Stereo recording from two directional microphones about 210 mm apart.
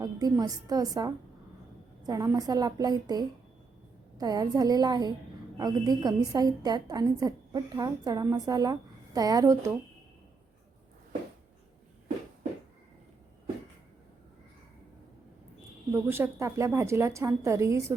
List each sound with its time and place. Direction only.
0.0 s a woman's voice: 20° right (ahead or behind)
15.9 s a woman's voice: 10° right (ahead or behind)